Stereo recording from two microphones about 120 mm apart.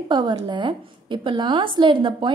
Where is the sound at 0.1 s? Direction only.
40° right (ahead or behind).